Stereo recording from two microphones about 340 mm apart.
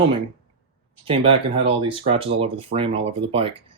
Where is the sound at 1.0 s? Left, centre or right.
Centre.